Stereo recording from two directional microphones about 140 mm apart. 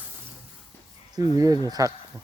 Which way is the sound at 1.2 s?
25° right (ahead or behind).